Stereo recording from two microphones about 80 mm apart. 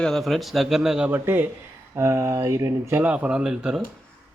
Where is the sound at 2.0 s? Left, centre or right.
Right.